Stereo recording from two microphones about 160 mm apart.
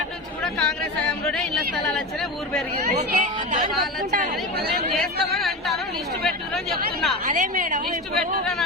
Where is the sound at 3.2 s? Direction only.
50° right (ahead or behind).